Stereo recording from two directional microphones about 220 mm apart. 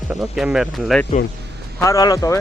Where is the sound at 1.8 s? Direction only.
15° left (ahead or behind).